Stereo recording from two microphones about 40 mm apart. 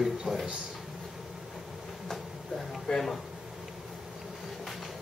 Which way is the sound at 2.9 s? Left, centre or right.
Left.